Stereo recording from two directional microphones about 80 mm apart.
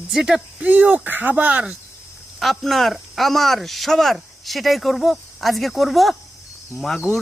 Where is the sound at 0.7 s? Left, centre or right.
Centre.